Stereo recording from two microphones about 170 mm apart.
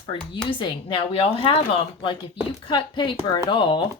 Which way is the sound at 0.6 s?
30° left (ahead or behind).